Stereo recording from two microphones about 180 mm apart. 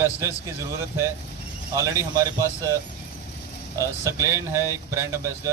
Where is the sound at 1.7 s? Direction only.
15° right (ahead or behind).